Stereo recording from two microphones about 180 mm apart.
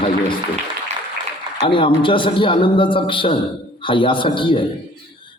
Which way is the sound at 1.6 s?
30° left (ahead or behind).